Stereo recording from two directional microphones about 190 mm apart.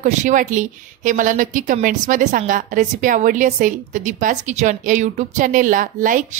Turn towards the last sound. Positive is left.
turn(degrees=-45)  # may be behind; listen again after turning